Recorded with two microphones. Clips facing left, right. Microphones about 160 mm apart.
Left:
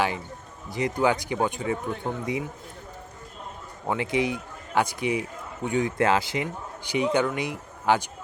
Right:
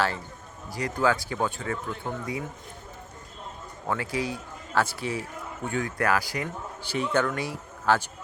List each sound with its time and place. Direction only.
0.7 s speech: 20° left (ahead or behind)
3.8 s speech: 20° left (ahead or behind)